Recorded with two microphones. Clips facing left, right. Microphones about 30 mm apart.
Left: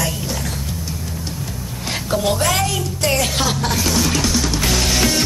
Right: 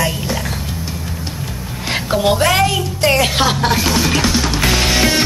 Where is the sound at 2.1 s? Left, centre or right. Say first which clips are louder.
Right 4 dB; right.